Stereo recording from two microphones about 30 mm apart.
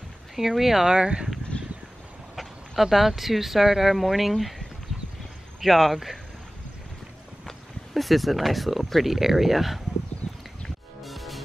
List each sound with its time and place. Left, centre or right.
0.4 s speech: centre
0.9 s speech: right
1.5 s a sound: left
2.8 s speech: centre
5.6 s speech: centre
7.4 s speech: centre
10.2 s a sound: left
11.0 s music: centre